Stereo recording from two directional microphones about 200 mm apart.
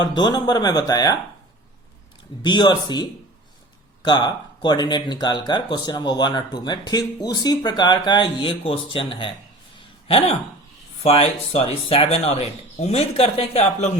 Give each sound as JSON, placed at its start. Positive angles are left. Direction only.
{"t": 0.0, "sound": "speech", "side_deg": 20}
{"t": 2.4, "sound": "speech", "side_deg": 20}
{"t": 9.7, "sound": "a sound", "side_deg": 30}
{"t": 11.0, "sound": "speech", "side_deg": 30}